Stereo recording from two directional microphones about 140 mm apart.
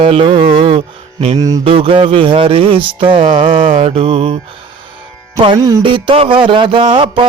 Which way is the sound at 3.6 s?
50° right (ahead or behind).